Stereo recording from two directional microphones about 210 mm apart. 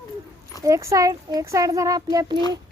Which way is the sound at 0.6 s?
15° right (ahead or behind).